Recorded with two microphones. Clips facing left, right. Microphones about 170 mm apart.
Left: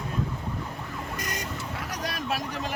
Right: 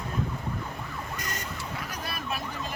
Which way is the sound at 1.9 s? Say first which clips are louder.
Left 6 dB; 75° left (ahead or behind).